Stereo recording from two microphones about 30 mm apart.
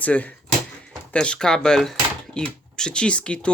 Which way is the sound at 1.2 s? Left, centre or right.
Left.